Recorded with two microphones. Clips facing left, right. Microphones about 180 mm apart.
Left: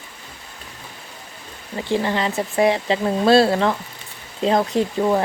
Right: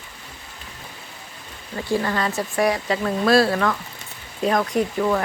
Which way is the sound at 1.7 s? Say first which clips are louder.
Left 2 dB; 20° left (ahead or behind).